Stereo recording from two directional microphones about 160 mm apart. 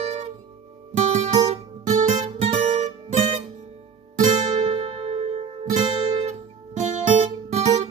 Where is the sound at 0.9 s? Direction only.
45° right (ahead or behind).